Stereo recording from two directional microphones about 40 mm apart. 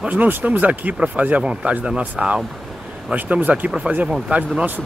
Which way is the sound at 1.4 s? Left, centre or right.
Right.